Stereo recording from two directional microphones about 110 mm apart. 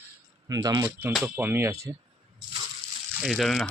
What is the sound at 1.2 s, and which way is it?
Speech, 15° right (ahead or behind).